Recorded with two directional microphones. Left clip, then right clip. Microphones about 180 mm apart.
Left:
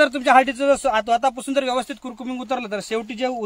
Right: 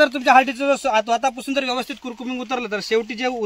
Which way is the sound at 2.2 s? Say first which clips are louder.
Even; 15° left (ahead or behind).